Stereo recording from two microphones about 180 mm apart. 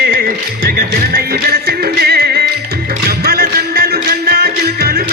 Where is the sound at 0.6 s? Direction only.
55° right (ahead or behind).